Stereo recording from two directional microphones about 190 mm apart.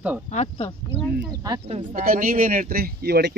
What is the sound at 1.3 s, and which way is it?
Speech, 20° right (ahead or behind).